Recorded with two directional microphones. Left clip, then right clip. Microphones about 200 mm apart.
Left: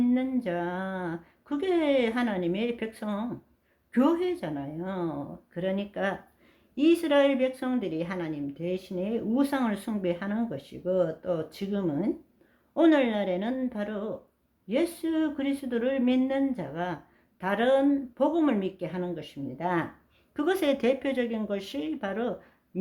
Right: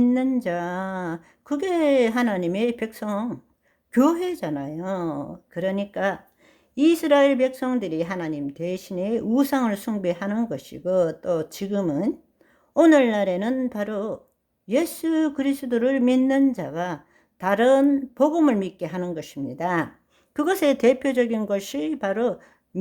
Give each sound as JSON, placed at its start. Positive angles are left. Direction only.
{"t": 0.0, "sound": "a woman's voice", "side_deg": -45}